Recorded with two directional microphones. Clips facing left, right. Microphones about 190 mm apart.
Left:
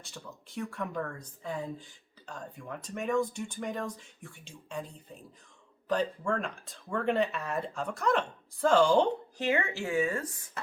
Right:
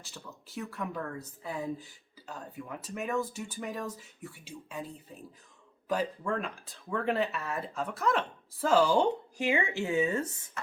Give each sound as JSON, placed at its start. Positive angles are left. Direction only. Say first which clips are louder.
{"t": 0.0, "sound": "speech", "louder": "left 1 dB", "side_deg": 0}